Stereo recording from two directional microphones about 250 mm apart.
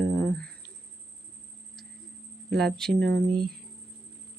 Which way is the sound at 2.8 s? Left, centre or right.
Centre.